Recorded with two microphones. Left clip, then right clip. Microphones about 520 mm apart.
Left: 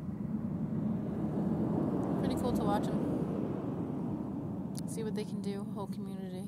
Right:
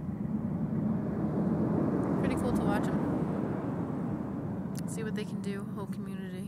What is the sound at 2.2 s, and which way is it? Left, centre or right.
Vehicle, left.